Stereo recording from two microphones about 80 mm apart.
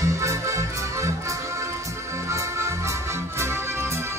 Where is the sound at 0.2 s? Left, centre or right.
Right.